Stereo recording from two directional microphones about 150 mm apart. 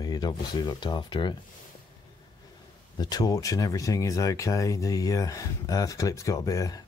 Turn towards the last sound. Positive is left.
turn(degrees=25)  # may be behind; listen again after turning